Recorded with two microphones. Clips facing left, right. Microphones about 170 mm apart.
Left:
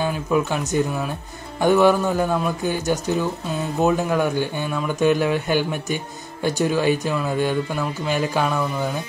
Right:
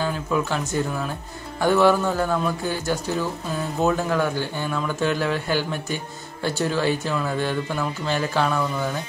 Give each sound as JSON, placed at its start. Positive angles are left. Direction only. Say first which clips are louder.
{"t": 0.0, "sound": "speech", "louder": "left 3 dB", "side_deg": 15}